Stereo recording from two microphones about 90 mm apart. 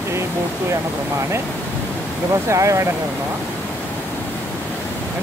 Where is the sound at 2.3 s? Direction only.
35° right (ahead or behind).